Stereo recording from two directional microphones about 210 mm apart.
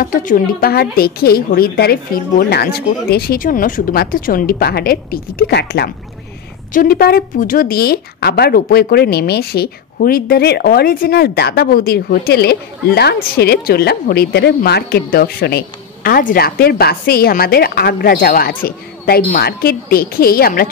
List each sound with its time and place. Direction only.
0.0 s speech: 40° left (ahead or behind)